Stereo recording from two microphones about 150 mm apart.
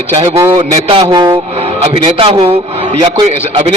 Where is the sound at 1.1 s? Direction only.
25° right (ahead or behind).